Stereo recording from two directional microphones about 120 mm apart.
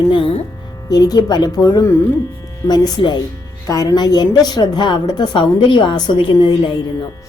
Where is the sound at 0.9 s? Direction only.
30° left (ahead or behind).